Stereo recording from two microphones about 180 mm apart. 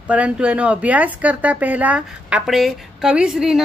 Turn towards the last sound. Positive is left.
turn(degrees=-5)  # may be behind; listen again after turning